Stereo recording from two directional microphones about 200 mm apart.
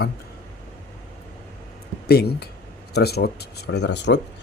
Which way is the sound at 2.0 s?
55° left (ahead or behind).